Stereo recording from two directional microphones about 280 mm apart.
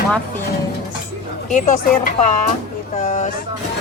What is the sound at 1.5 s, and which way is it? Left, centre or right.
Speech, left.